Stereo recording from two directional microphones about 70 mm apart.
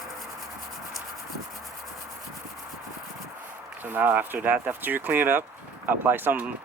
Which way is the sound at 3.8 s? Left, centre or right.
Right.